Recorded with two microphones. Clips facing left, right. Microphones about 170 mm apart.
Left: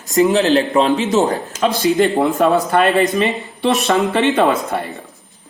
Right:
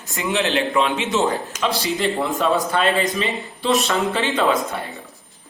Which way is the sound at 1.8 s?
50° left (ahead or behind).